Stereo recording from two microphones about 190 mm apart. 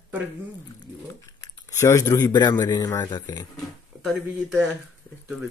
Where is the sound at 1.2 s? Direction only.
15° left (ahead or behind).